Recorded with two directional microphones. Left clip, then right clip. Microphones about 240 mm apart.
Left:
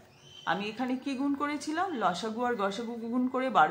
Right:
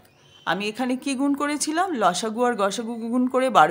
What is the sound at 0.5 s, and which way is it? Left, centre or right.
A woman's voice, right.